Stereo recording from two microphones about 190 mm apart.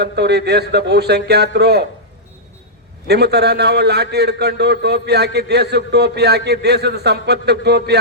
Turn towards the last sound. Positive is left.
turn(degrees=-60)  # may be behind; listen again after turning